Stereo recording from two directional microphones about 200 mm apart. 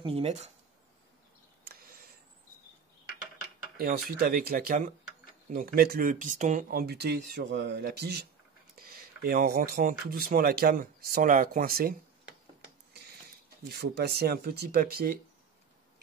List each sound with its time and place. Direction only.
0.0 s speech: 30° right (ahead or behind)
1.6 s a sound: 50° right (ahead or behind)
3.7 s speech: 50° right (ahead or behind)
13.7 s speech: 55° right (ahead or behind)